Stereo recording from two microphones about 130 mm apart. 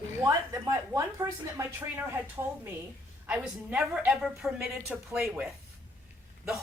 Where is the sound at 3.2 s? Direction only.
10° right (ahead or behind).